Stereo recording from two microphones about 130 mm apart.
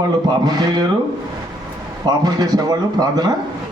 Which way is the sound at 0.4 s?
30° right (ahead or behind).